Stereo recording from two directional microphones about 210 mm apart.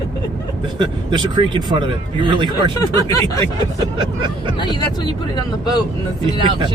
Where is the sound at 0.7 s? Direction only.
20° right (ahead or behind).